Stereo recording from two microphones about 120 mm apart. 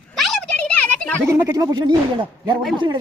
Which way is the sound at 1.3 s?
25° right (ahead or behind).